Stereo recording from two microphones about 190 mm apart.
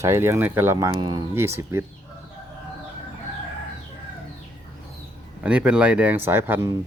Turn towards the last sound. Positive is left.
turn(degrees=-15)  # may be behind; listen again after turning